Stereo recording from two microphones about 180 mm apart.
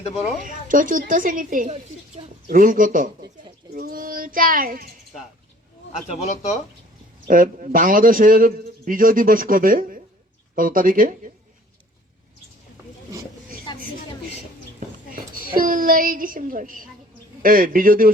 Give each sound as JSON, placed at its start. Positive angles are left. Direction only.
{"t": 0.4, "sound": "a man's voice", "side_deg": -45}
{"t": 3.8, "sound": "child singing", "side_deg": -50}
{"t": 7.3, "sound": "a man's voice", "side_deg": -50}
{"t": 13.7, "sound": "a sound", "side_deg": 25}
{"t": 15.1, "sound": "a woman's voice", "side_deg": -50}